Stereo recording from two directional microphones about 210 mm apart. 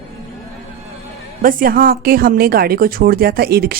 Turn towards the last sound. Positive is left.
turn(degrees=-45)  # may be behind; listen again after turning